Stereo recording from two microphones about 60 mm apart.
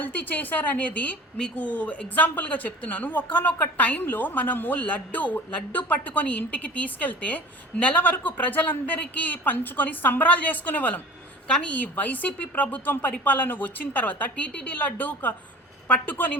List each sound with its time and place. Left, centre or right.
0.0 s a woman's voice: left